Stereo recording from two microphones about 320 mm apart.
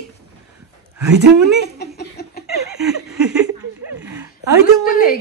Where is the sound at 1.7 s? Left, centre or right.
Left.